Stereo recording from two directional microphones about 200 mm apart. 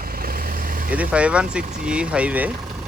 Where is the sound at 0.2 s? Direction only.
45° right (ahead or behind).